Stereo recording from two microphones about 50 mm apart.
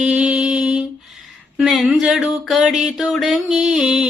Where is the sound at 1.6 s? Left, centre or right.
Centre.